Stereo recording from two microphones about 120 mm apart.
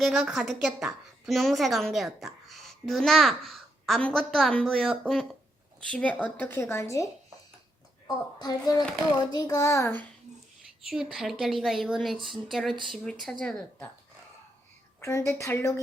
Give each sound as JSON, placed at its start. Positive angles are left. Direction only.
{"t": 0.0, "sound": "a woman's voice", "side_deg": 0}
{"t": 5.9, "sound": "a woman's voice", "side_deg": 10}
{"t": 10.8, "sound": "a woman's voice", "side_deg": -5}
{"t": 15.0, "sound": "a woman's voice", "side_deg": 25}